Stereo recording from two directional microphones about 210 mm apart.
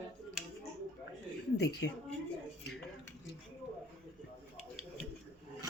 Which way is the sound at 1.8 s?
55° left (ahead or behind).